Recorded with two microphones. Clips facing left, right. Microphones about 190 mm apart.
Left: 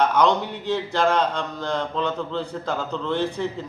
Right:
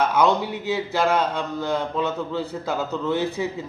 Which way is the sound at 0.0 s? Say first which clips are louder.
Even; 5° right (ahead or behind).